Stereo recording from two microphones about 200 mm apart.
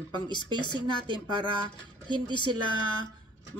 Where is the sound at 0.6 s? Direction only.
20° left (ahead or behind).